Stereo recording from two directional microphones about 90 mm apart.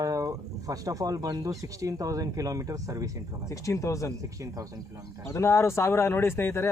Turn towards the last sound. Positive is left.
turn(degrees=25)  # may be behind; listen again after turning